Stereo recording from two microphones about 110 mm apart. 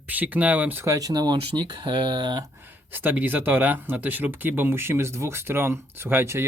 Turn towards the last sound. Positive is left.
turn(degrees=-20)  # may be behind; listen again after turning